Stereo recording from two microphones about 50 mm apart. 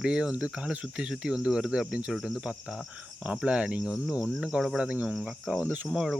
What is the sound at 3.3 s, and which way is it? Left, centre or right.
Speech, right.